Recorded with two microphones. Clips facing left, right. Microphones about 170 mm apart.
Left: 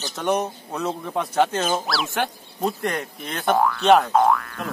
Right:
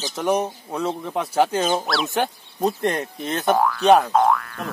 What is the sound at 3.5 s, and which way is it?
Speech, centre (ahead or behind).